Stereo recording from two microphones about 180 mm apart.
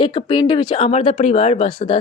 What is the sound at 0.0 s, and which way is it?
A woman's voice, 25° left (ahead or behind).